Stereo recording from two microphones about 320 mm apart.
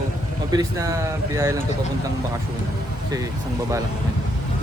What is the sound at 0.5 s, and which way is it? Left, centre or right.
Speech, centre.